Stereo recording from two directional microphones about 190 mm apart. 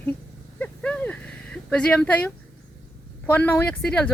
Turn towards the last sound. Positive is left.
turn(degrees=5)  # may be behind; listen again after turning